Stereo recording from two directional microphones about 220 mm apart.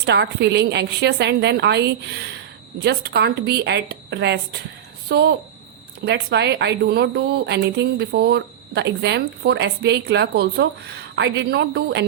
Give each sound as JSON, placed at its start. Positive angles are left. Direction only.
{"t": 0.0, "sound": "a woman's voice", "side_deg": -50}